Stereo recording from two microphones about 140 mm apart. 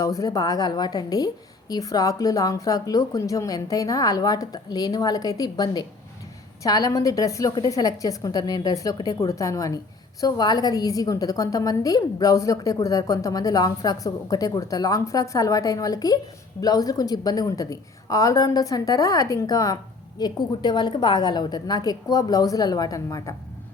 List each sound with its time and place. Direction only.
0.0 s a woman's voice: 25° left (ahead or behind)